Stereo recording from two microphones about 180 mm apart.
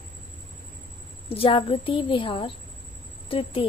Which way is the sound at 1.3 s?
30° left (ahead or behind).